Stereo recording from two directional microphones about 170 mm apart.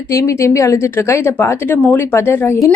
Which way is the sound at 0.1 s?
20° left (ahead or behind).